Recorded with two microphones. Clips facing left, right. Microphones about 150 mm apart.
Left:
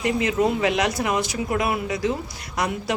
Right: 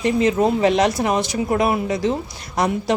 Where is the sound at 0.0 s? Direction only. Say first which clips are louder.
Right 4 dB; 30° right (ahead or behind).